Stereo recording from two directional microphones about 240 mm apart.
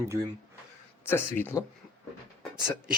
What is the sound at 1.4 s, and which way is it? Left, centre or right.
Speech, centre.